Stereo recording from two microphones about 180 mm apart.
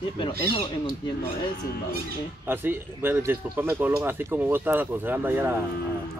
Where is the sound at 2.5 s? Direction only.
10° right (ahead or behind).